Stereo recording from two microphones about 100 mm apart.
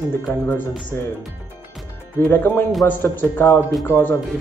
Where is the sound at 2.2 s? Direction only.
20° left (ahead or behind).